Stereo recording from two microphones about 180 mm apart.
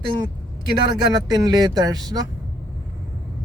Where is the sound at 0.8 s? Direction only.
20° right (ahead or behind).